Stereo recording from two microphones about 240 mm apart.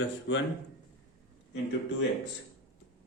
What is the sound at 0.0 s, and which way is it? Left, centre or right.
Speech, left.